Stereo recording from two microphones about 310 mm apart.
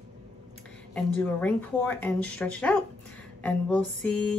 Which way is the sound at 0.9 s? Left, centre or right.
Centre.